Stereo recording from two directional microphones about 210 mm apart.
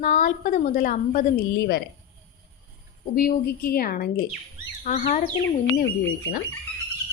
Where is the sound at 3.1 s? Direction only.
45° left (ahead or behind).